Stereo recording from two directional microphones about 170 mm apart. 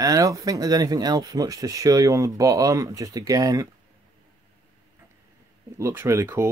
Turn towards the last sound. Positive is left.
turn(degrees=-15)  # may be behind; listen again after turning